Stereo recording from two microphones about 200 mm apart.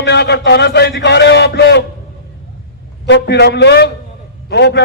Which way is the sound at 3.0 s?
60° left (ahead or behind).